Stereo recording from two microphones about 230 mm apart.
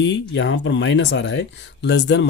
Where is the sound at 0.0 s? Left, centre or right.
Left.